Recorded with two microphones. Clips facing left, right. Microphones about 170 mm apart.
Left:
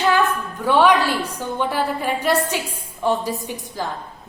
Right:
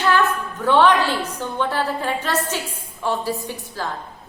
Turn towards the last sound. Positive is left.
turn(degrees=15)  # may be behind; listen again after turning